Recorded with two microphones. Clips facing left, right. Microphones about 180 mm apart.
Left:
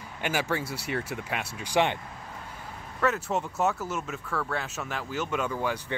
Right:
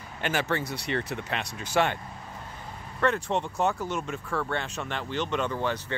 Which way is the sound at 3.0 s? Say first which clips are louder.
Right 1 dB; 5° left (ahead or behind).